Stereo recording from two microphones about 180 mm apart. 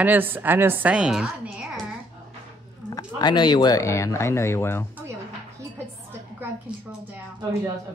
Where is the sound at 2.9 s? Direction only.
25° left (ahead or behind).